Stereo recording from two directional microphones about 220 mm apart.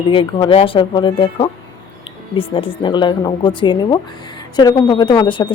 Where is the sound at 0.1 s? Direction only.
20° left (ahead or behind).